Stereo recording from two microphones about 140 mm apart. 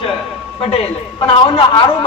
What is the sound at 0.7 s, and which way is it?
A man's voice, 45° left (ahead or behind).